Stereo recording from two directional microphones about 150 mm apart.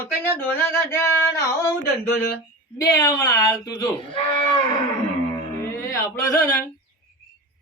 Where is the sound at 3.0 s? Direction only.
25° left (ahead or behind).